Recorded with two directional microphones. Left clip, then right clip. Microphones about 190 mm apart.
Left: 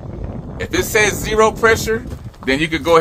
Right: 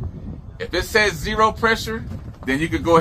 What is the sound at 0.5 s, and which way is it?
Speech, 35° left (ahead or behind).